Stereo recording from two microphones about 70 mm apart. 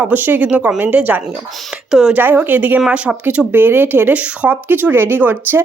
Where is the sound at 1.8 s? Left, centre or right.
Centre.